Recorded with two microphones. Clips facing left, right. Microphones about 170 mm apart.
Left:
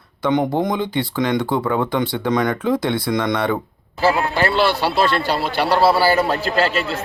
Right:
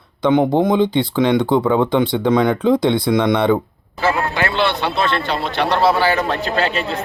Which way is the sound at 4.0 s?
35° left (ahead or behind).